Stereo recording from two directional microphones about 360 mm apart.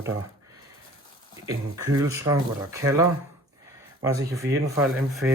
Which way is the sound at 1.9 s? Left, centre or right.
Centre.